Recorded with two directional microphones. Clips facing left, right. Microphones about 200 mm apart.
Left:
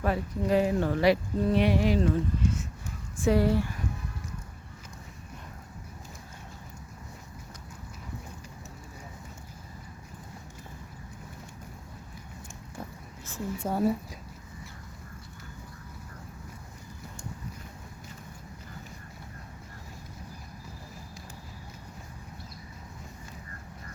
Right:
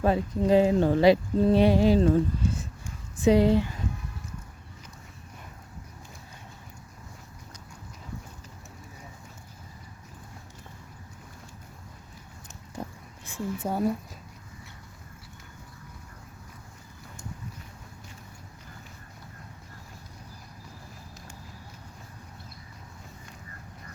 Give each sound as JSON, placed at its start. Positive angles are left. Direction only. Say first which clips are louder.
{"t": 0.0, "sound": "speech", "louder": "right 5 dB", "side_deg": -25}
{"t": 3.2, "sound": "speech", "louder": "right 4 dB", "side_deg": -20}
{"t": 13.2, "sound": "speech", "louder": "right 2 dB", "side_deg": -10}
{"t": 13.7, "sound": "speech", "louder": "left 1 dB", "side_deg": 0}